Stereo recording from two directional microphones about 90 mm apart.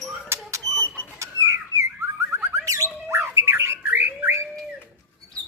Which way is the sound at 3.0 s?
30° right (ahead or behind).